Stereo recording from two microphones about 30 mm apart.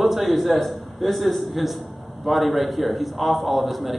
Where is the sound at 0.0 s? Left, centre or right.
Centre.